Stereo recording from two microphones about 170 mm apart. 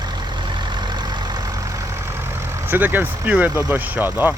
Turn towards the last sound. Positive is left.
turn(degrees=-10)  # may be behind; listen again after turning